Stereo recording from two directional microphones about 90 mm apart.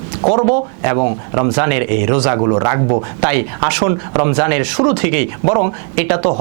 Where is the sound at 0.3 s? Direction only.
15° right (ahead or behind).